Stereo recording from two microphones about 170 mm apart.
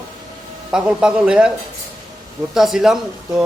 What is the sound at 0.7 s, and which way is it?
Speech, 5° right (ahead or behind).